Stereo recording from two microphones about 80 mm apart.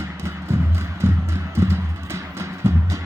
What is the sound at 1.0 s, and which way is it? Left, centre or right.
Music, right.